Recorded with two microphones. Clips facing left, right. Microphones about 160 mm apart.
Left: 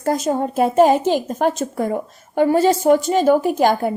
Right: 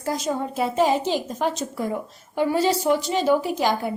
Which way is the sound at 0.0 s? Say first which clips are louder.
Left 6 dB; 50° left (ahead or behind).